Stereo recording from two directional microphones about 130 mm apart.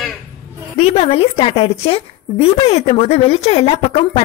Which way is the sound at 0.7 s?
55° left (ahead or behind).